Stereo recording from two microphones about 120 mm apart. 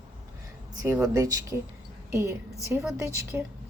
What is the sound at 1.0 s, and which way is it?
Speech, 30° right (ahead or behind).